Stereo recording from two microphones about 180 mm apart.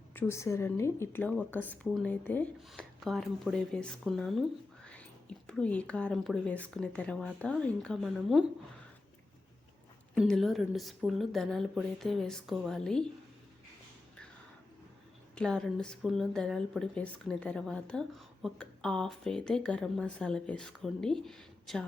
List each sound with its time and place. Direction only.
0.1 s a woman's voice: 15° left (ahead or behind)
5.5 s a woman's voice: 5° left (ahead or behind)
10.2 s a woman's voice: centre (ahead or behind)
15.4 s a woman's voice: 5° left (ahead or behind)